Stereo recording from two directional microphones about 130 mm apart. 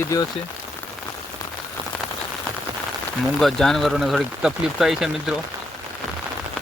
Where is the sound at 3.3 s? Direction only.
5° left (ahead or behind).